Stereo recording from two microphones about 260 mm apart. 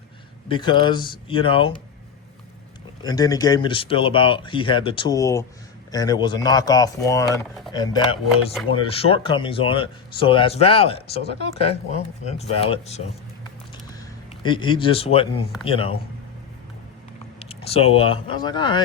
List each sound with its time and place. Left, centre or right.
0.4 s speech: centre
3.0 s speech: centre
14.4 s speech: centre
17.4 s speech: left